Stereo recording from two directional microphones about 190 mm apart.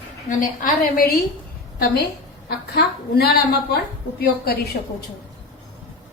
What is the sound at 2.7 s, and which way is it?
A woman's voice, 55° left (ahead or behind).